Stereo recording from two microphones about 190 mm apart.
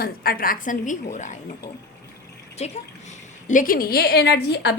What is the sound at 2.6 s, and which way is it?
A woman's voice, 35° left (ahead or behind).